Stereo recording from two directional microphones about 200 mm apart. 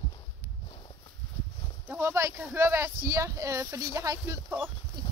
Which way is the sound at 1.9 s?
10° right (ahead or behind).